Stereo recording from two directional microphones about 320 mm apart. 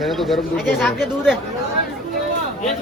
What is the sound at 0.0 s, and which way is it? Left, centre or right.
Speech, centre.